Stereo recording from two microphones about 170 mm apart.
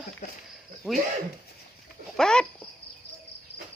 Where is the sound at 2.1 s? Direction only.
5° left (ahead or behind).